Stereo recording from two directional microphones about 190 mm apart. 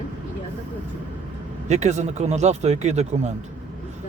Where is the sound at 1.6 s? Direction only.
35° right (ahead or behind).